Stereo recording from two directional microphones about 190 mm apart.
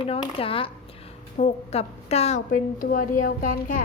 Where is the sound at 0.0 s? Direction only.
30° left (ahead or behind).